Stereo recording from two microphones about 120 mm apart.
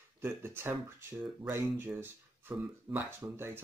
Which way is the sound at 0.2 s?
20° right (ahead or behind).